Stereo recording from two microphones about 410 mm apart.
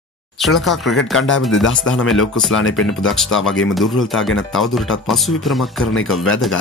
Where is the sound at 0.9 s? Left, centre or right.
Left.